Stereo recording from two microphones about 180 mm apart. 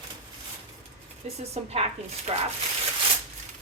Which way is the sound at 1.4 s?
35° right (ahead or behind).